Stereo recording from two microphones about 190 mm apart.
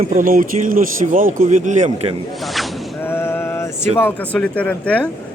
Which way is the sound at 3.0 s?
10° left (ahead or behind).